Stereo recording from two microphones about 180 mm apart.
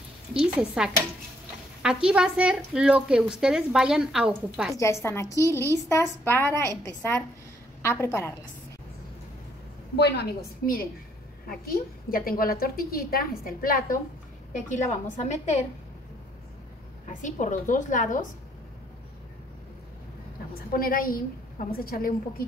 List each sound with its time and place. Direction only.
0.3 s a woman's voice: 5° right (ahead or behind)
5.0 s a woman's voice: 15° left (ahead or behind)
9.9 s a woman's voice: 70° left (ahead or behind); by 13.9 s 50° left (ahead or behind)
14.7 s a woman's voice: 40° left (ahead or behind)
17.1 s a woman's voice: 45° left (ahead or behind)
20.5 s a woman's voice: 55° left (ahead or behind)